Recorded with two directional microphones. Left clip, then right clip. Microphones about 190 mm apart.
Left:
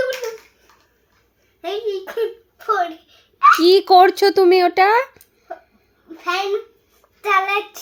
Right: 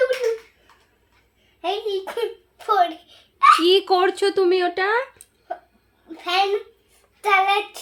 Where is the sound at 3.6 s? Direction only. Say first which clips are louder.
Left 6 dB; 20° left (ahead or behind).